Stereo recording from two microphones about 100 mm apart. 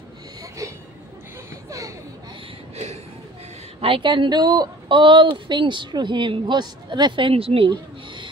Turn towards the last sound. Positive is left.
turn(degrees=-75)  # may be behind; listen again after turning